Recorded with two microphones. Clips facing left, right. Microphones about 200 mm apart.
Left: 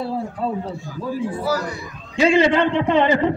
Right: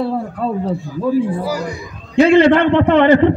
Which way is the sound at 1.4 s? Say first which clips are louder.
Right 1 dB; 10° right (ahead or behind).